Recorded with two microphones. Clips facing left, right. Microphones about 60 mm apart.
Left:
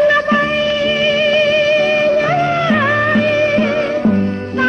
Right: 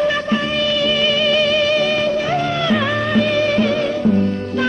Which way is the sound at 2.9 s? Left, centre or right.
Left.